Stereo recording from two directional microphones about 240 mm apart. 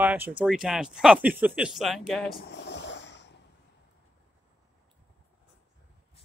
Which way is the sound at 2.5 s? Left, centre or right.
Left.